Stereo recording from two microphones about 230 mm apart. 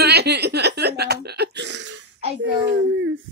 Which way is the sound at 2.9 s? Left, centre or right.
Right.